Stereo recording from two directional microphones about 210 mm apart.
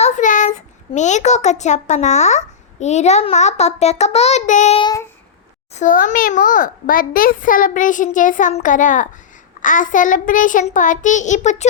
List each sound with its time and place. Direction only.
0.0 s child singing: 35° left (ahead or behind)
0.9 s a child's voice: 35° left (ahead or behind)
5.7 s a child's voice: 40° left (ahead or behind)